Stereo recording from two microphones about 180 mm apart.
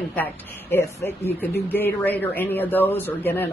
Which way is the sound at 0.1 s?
10° left (ahead or behind).